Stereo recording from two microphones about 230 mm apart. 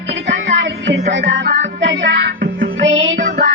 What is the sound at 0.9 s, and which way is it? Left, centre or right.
Music, right.